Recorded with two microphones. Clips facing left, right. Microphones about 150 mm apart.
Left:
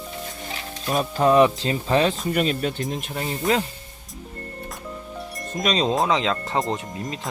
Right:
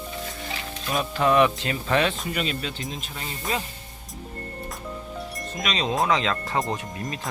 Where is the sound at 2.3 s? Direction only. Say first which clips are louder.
Left 6 dB; 45° left (ahead or behind).